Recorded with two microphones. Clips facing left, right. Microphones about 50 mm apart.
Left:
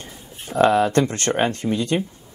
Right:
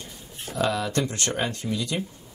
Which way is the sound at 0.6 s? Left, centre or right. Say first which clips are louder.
Left 9 dB; left.